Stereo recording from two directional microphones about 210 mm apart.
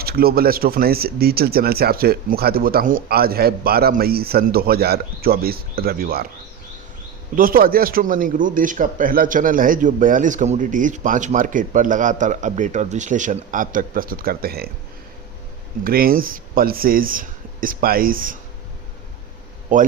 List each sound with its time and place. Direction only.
0.0 s speech: 45° right (ahead or behind)
7.3 s speech: 45° right (ahead or behind)
15.8 s speech: 45° right (ahead or behind)
19.7 s speech: 35° right (ahead or behind)